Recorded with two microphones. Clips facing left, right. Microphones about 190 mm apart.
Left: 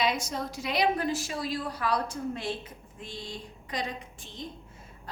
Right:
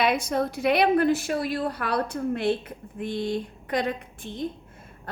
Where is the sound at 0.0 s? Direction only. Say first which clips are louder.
Right 6 dB; 60° right (ahead or behind).